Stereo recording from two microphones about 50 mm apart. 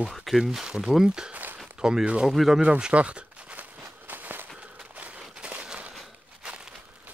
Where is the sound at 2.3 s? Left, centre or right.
Centre.